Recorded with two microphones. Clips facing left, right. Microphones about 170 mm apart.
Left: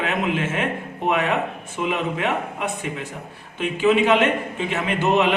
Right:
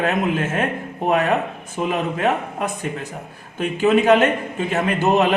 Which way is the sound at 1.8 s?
40° right (ahead or behind).